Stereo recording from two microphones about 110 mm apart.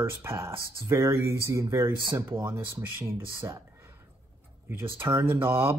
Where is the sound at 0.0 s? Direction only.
20° right (ahead or behind).